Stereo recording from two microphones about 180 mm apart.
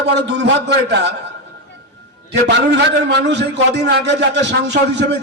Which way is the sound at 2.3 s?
70° right (ahead or behind).